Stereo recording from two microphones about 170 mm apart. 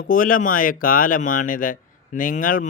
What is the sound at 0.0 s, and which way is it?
Speech, 55° left (ahead or behind).